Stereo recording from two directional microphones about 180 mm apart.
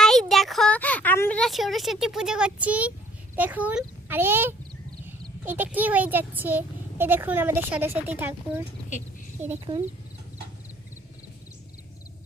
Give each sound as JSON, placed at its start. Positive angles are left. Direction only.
{"t": 0.0, "sound": "speech", "side_deg": 0}
{"t": 9.7, "sound": "speech", "side_deg": -30}